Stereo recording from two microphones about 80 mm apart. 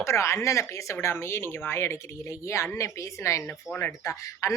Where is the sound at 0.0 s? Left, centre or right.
Left.